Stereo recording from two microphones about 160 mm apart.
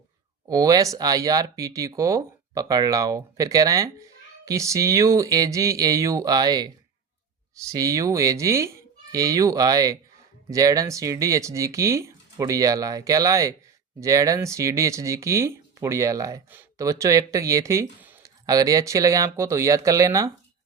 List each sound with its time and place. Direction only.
0.4 s speech: 25° right (ahead or behind)